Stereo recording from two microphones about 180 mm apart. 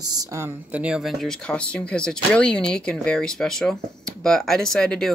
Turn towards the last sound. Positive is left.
turn(degrees=5)  # may be behind; listen again after turning